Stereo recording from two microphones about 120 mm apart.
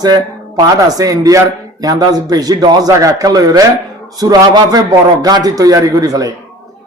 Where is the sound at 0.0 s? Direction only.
30° right (ahead or behind).